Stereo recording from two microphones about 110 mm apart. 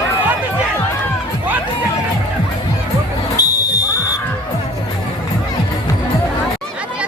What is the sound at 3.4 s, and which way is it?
Music, 30° left (ahead or behind).